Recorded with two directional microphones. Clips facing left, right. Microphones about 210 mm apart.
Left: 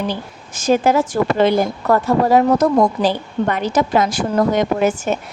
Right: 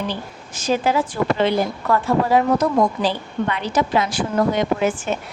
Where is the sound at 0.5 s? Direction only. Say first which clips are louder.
Left 5 dB; 45° left (ahead or behind).